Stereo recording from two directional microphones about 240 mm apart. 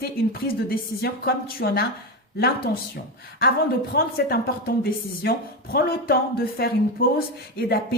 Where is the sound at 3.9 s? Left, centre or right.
Left.